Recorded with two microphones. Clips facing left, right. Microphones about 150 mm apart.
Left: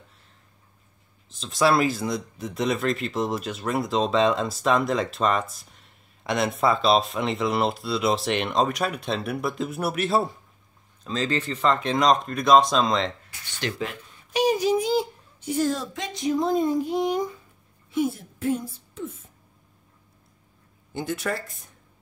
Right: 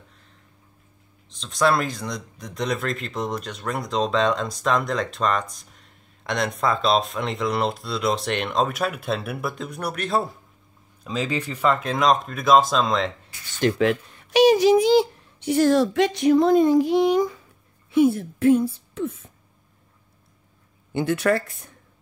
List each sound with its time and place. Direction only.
1.3 s speech: 5° left (ahead or behind)
11.1 s speech: 10° right (ahead or behind)
13.7 s a child's voice: 75° right (ahead or behind)
17.9 s a woman's voice: 65° right (ahead or behind)
20.9 s a woman's voice: 65° right (ahead or behind)